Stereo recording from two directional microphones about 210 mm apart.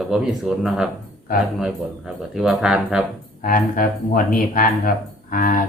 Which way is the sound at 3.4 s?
40° left (ahead or behind).